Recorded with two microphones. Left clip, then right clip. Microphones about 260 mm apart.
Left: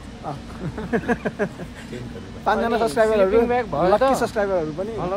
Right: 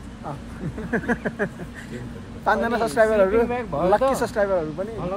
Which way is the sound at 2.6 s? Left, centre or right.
Centre.